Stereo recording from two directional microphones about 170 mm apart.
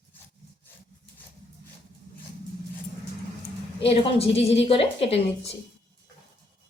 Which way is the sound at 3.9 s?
35° left (ahead or behind).